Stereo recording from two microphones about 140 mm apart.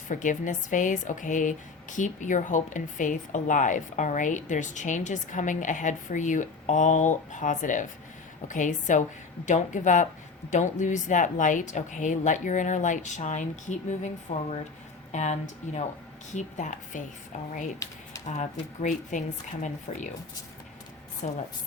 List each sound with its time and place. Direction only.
0.1 s speech: 65° left (ahead or behind)
17.8 s speech: 25° left (ahead or behind)
18.3 s speech: 60° left (ahead or behind)
21.2 s speech: 60° left (ahead or behind)